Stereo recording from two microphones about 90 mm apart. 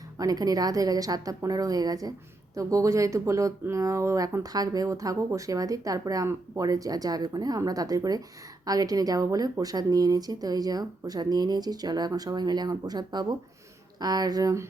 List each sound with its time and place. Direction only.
0.2 s speech: 45° right (ahead or behind)